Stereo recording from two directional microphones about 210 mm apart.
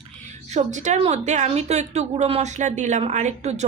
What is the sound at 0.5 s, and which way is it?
Speech, 35° right (ahead or behind).